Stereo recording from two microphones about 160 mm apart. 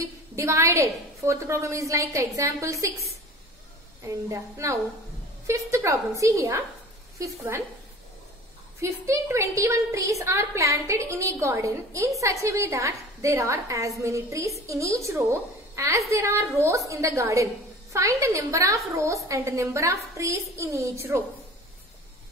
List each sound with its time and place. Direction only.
0.0 s a woman's voice: 20° right (ahead or behind)
8.8 s a woman's voice: 15° right (ahead or behind)